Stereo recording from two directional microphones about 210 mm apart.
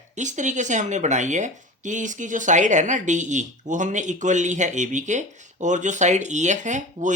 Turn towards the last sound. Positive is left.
turn(degrees=-35)  # may be behind; listen again after turning